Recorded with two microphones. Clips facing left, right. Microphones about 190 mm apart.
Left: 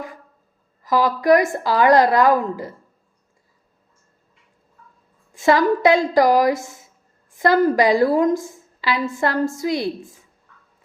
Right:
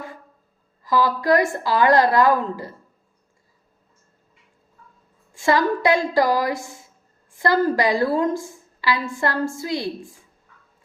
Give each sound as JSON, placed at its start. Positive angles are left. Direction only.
{"t": 0.9, "sound": "a woman's voice", "side_deg": 20}
{"t": 5.3, "sound": "a woman's voice", "side_deg": 20}